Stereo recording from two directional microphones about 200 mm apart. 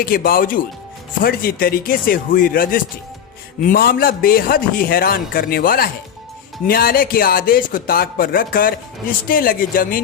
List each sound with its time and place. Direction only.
0.0 s speech: 45° left (ahead or behind)